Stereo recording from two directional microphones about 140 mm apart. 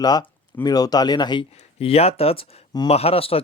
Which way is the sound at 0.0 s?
30° left (ahead or behind).